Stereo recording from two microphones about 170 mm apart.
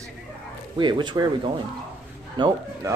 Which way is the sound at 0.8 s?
25° right (ahead or behind).